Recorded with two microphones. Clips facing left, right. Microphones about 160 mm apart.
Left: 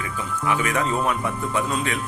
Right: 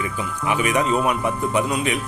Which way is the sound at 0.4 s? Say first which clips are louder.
Right 3 dB; 15° right (ahead or behind).